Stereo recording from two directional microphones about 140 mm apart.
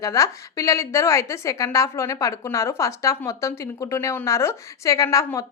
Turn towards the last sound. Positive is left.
turn(degrees=20)  # may be behind; listen again after turning